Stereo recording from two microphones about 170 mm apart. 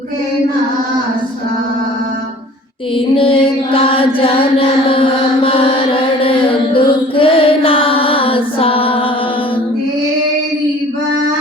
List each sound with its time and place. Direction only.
3.2 s mantra: 30° left (ahead or behind)
6.2 s music: 30° left (ahead or behind)